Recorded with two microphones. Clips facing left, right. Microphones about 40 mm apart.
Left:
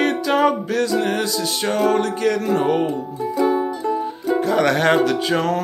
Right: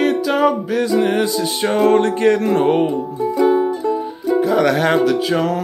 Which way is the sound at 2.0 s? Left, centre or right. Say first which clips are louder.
Right 5 dB; right.